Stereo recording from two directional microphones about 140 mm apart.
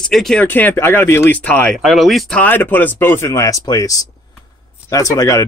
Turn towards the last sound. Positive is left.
turn(degrees=25)  # may be behind; listen again after turning